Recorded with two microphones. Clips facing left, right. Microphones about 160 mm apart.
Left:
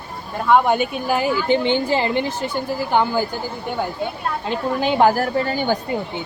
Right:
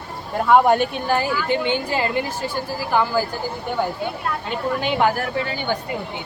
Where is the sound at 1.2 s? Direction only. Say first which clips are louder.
Left 3 dB; 25° left (ahead or behind).